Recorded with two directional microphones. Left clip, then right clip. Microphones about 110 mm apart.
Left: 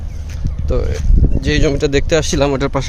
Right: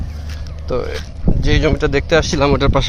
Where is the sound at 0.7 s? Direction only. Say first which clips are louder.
Right 1 dB; 35° left (ahead or behind).